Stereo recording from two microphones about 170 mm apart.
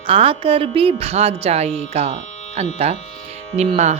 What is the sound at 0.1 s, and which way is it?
Speech, 30° right (ahead or behind).